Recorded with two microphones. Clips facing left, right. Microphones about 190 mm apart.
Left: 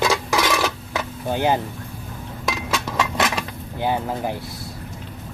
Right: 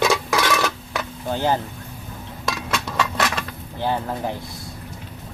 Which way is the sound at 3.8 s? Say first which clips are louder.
Left 1 dB; 10° left (ahead or behind).